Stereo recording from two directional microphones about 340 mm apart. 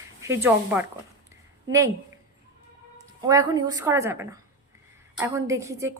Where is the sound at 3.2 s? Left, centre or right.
Centre.